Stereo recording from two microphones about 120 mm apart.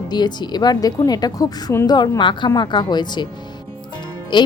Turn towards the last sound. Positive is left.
turn(degrees=40)  # may be behind; listen again after turning